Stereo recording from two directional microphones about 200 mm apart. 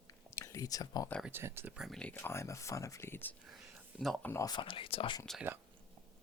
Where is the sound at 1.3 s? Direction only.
10° right (ahead or behind).